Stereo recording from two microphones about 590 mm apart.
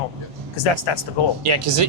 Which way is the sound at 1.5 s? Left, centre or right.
Right.